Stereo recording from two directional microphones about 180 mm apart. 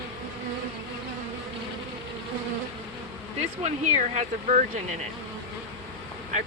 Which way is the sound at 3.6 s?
40° right (ahead or behind).